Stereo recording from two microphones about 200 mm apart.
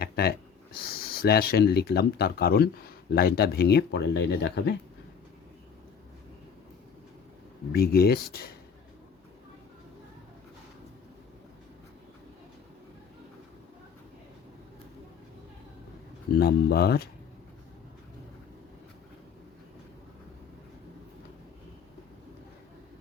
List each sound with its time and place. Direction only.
0.0 s a sound: 50° left (ahead or behind)
0.8 s speech: 50° left (ahead or behind)
7.7 s speech: 50° left (ahead or behind)
16.4 s speech: 50° left (ahead or behind)